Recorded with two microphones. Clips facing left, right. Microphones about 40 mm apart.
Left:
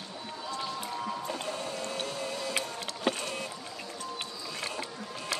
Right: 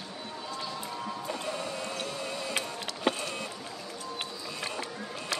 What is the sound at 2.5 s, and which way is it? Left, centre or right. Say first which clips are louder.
Vehicle: even; centre.